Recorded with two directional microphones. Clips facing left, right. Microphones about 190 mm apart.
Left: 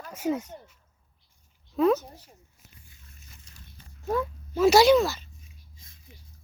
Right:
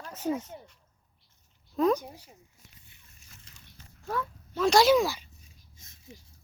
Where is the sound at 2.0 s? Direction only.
10° right (ahead or behind).